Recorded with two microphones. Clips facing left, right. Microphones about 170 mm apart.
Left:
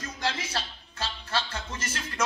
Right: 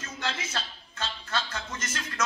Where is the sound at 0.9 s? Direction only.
30° left (ahead or behind).